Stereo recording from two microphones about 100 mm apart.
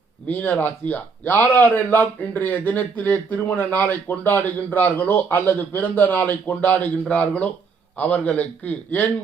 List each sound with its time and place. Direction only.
0.3 s a man's voice: 20° left (ahead or behind)